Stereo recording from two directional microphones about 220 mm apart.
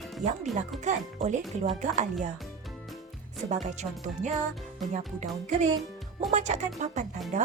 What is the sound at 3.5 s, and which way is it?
Speech, 30° right (ahead or behind).